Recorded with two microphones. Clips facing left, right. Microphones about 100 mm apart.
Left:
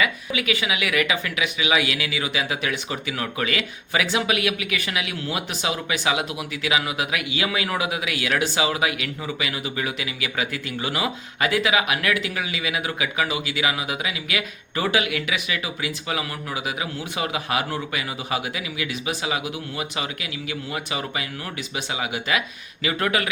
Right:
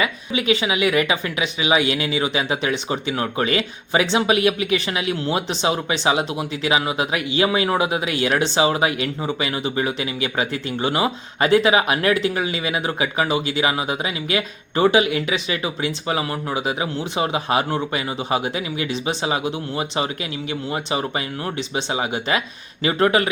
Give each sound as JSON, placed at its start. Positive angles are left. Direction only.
{"t": 0.0, "sound": "speech", "side_deg": -25}